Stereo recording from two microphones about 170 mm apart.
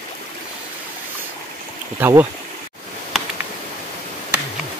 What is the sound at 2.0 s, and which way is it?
Speech, 15° right (ahead or behind).